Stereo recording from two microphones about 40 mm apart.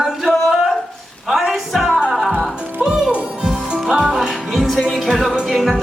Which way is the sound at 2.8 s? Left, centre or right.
Right.